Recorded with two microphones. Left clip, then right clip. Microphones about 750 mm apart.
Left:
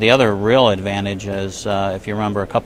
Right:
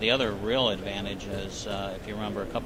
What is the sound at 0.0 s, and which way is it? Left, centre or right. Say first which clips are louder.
Speech: left 12 dB; left.